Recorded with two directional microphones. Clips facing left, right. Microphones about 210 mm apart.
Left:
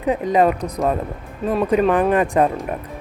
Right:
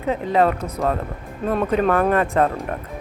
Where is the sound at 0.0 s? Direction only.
15° left (ahead or behind).